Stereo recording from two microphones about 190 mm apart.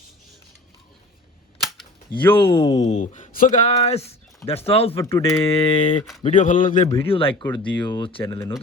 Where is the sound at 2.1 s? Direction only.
25° left (ahead or behind).